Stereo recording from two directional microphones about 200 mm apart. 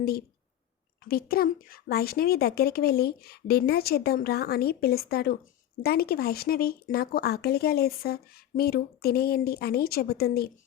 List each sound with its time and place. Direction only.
1.0 s speech: 50° left (ahead or behind)